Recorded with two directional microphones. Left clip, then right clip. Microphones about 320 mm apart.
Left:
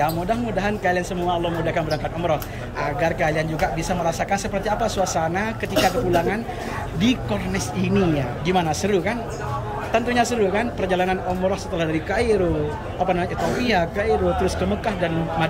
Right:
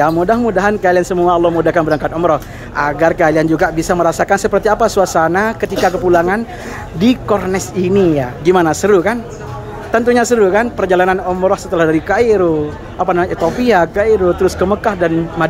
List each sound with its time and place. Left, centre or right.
0.0 s speech: centre
1.2 s speech: right
1.7 s speech: centre